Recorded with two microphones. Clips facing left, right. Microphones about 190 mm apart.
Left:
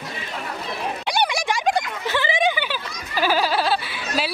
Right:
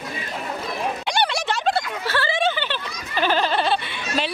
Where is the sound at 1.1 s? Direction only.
10° left (ahead or behind).